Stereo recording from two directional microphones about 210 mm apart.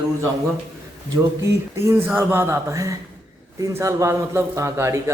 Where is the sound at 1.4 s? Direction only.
10° right (ahead or behind).